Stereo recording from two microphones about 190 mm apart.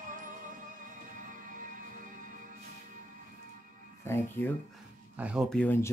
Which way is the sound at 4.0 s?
10° left (ahead or behind).